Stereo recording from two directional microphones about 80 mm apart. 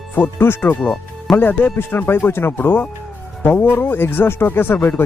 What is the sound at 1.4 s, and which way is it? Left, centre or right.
Speech, left.